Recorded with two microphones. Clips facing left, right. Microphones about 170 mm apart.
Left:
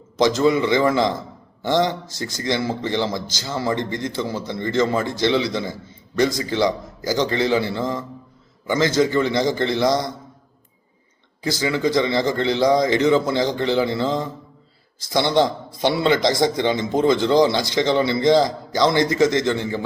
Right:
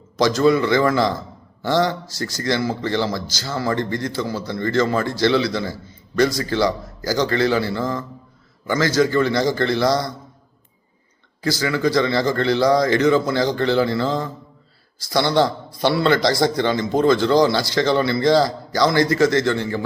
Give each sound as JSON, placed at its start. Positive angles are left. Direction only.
{"t": 0.2, "sound": "a man's voice", "side_deg": 20}
{"t": 11.4, "sound": "a man's voice", "side_deg": 20}